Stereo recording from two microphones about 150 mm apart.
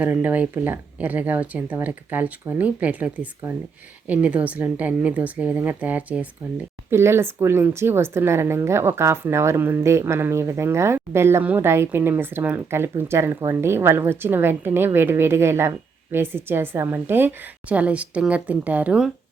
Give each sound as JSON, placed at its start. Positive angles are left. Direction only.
{"t": 0.0, "sound": "a woman's voice", "side_deg": -10}